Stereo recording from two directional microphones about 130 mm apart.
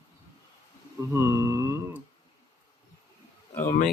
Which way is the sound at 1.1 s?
25° right (ahead or behind).